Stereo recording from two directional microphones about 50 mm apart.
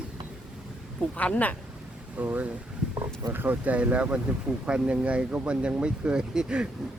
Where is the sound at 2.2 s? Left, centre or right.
Right.